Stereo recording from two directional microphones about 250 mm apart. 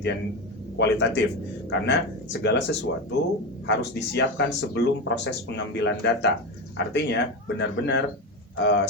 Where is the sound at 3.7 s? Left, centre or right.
Left.